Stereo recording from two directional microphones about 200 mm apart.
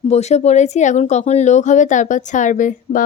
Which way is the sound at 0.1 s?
35° left (ahead or behind).